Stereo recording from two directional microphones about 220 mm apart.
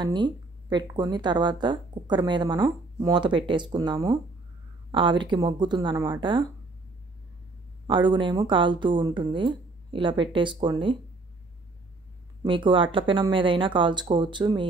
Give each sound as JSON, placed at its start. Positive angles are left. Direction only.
{"t": 0.0, "sound": "speech", "side_deg": -20}
{"t": 7.8, "sound": "speech", "side_deg": -20}
{"t": 12.4, "sound": "speech", "side_deg": -20}